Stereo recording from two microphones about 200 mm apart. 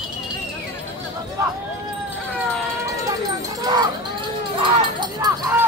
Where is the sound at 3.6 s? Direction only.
20° right (ahead or behind).